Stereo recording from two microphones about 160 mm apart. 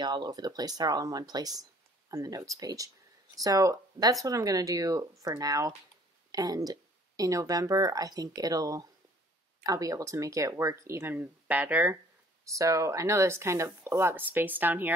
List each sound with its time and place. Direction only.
0.0 s speech: 25° right (ahead or behind); by 15.0 s 10° right (ahead or behind)